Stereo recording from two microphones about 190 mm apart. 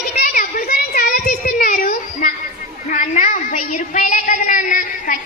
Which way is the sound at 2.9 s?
40° left (ahead or behind).